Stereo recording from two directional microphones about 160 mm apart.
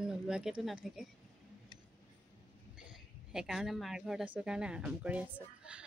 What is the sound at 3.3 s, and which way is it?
Speech, centre (ahead or behind).